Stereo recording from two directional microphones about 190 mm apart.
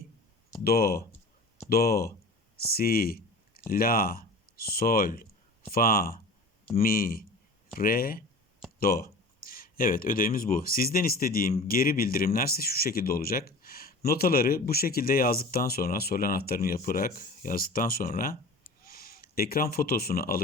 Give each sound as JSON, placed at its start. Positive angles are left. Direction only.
{"t": 0.6, "sound": "speech", "side_deg": 55}
{"t": 2.6, "sound": "a sound", "side_deg": 55}
{"t": 3.7, "sound": "speech", "side_deg": 50}